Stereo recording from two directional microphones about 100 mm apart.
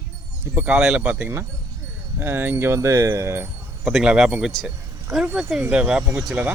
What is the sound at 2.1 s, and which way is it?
Speech, 25° right (ahead or behind).